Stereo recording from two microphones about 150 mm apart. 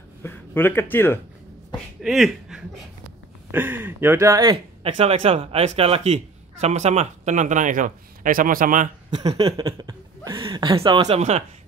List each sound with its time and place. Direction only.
0.2 s speech: 15° left (ahead or behind)
2.0 s a sound: centre (ahead or behind)
3.5 s speech: 15° right (ahead or behind)
4.8 s a man's voice: 40° right (ahead or behind); by 8.9 s 65° right (ahead or behind)
9.5 s speech: 25° right (ahead or behind)
11.1 s a man's voice: 45° right (ahead or behind)